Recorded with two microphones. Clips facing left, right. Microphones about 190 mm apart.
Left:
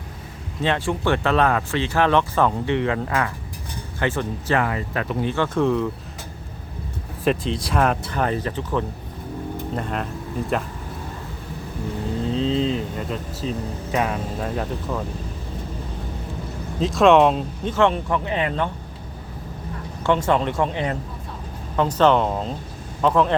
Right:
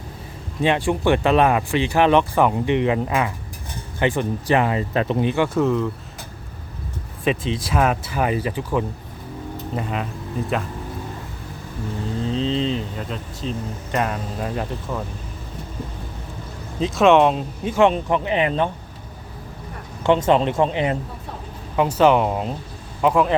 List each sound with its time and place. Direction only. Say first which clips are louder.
0.6 s speech: right 3 dB; 15° right (ahead or behind)
5.5 s speech: left 3 dB; centre (ahead or behind)
7.3 s speech: even; centre (ahead or behind)
12.2 s speech: left 1 dB; centre (ahead or behind)
16.8 s speech: even; centre (ahead or behind); by 18.7 s 20° right (ahead or behind)
20.1 s speech: right 3 dB; 20° right (ahead or behind)